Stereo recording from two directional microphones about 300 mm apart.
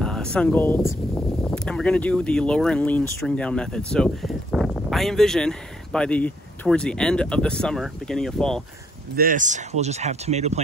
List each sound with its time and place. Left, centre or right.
0.0 s speech: centre
9.1 s speech: right